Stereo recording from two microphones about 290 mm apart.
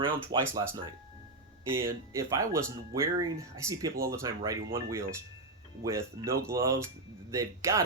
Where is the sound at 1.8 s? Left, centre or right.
Centre.